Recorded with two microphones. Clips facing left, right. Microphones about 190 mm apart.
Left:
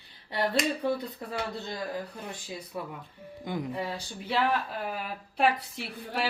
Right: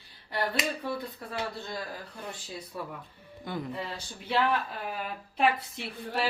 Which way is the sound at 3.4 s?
15° left (ahead or behind).